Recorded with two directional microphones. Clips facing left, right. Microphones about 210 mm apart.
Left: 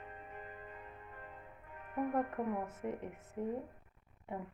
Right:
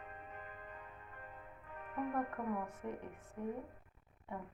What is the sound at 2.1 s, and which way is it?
Speech, 20° left (ahead or behind).